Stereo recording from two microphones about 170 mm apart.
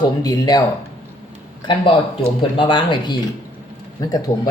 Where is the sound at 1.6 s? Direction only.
30° left (ahead or behind).